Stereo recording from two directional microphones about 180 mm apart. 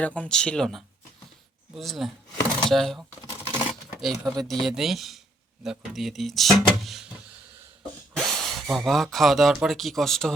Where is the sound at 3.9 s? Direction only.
Centre (ahead or behind).